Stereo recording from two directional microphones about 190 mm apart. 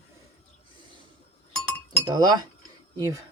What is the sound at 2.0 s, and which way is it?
Speech, 20° right (ahead or behind).